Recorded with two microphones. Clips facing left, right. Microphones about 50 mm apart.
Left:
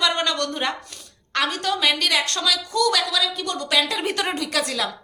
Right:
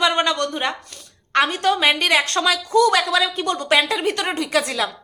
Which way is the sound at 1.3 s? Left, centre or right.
Right.